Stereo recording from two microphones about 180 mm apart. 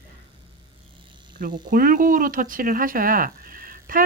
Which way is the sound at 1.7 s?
50° right (ahead or behind).